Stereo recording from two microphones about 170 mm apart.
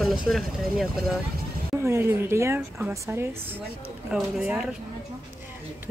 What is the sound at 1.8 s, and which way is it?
A woman's voice, 15° right (ahead or behind).